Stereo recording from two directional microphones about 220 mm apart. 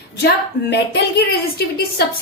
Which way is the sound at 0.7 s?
45° left (ahead or behind).